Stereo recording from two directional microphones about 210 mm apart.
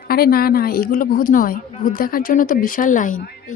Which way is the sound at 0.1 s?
45° left (ahead or behind).